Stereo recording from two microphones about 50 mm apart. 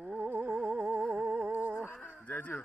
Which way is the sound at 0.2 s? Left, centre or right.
Right.